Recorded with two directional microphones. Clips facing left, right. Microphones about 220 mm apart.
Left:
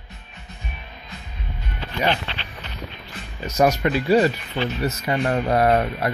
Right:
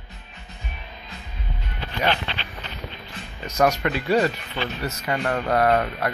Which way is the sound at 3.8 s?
15° left (ahead or behind).